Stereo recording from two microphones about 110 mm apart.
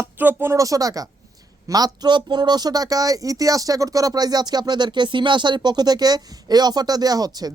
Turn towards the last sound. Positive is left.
turn(degrees=-35)  # may be behind; listen again after turning